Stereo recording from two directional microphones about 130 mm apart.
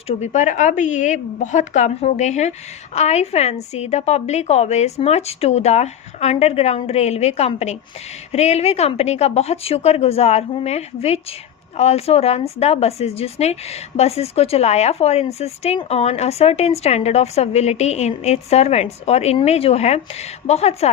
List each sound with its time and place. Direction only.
0.2 s a woman's voice: 65° left (ahead or behind)